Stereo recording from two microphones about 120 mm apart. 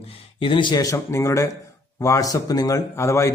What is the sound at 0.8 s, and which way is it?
A man's voice, 25° left (ahead or behind).